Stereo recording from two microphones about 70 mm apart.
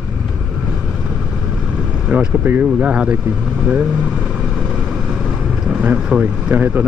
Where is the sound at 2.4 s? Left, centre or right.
Right.